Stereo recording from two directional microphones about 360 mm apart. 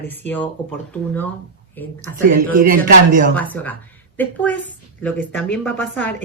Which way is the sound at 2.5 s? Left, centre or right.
Right.